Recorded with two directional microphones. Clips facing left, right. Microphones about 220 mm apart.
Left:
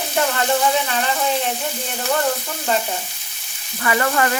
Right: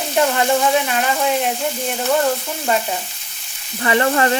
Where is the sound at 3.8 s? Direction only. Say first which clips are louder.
Right 3 dB; 25° right (ahead or behind).